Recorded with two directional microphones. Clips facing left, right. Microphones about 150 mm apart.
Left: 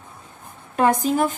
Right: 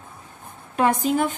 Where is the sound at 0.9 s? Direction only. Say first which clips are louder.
Left 2 dB; 40° left (ahead or behind).